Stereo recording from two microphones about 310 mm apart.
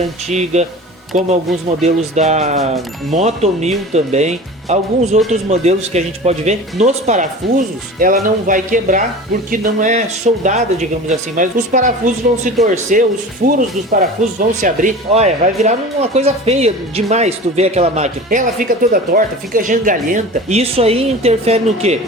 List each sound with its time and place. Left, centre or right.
0.3 s speech: right